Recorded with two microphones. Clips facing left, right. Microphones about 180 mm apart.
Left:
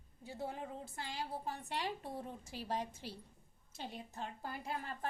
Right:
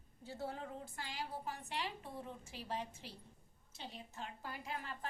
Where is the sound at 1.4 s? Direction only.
35° left (ahead or behind).